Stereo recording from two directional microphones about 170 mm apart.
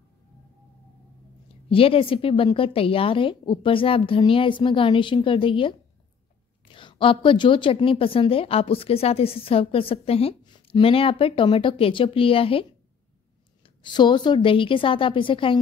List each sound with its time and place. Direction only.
1.7 s a woman's voice: 35° left (ahead or behind)
13.9 s a woman's voice: 25° left (ahead or behind)